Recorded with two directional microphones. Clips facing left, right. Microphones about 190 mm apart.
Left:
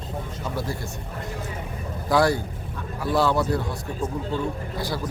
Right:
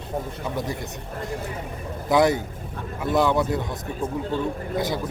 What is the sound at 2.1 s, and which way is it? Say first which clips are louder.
A man's voice: right 1 dB; 20° right (ahead or behind).